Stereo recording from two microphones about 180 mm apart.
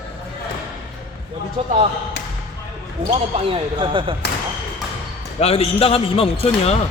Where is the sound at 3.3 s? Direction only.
30° right (ahead or behind).